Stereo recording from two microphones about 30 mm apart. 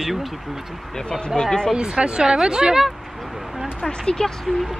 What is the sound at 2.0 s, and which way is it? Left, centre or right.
Speech, right.